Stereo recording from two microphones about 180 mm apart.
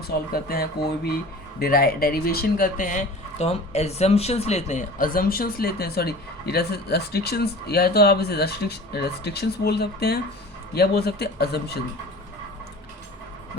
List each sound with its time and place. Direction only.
0.1 s speech: 55° left (ahead or behind)